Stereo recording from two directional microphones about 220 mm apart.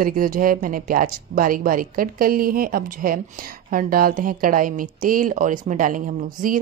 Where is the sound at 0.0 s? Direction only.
40° right (ahead or behind).